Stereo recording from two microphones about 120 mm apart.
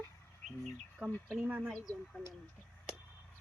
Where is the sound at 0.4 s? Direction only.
Centre (ahead or behind).